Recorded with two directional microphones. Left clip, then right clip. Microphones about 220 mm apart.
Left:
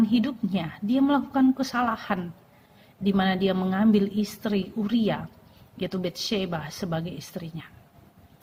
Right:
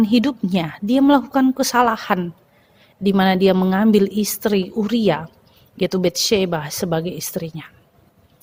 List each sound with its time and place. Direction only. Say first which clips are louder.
0.0 s a woman's voice: right 7 dB; 45° right (ahead or behind)